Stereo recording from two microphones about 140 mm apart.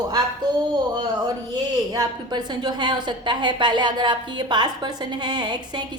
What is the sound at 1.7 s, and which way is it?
A woman's voice, 25° right (ahead or behind).